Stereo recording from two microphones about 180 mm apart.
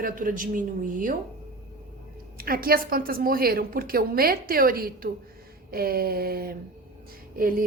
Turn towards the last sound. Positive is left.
turn(degrees=-50)  # may be behind; listen again after turning